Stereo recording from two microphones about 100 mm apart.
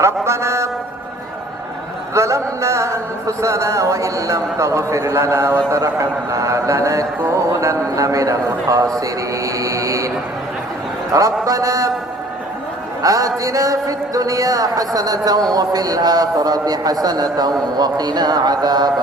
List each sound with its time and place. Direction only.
0.0 s a sound: 30° right (ahead or behind)
2.1 s a man's voice: 30° right (ahead or behind)
11.1 s a man's voice: 35° right (ahead or behind)
13.0 s a man's voice: 35° right (ahead or behind)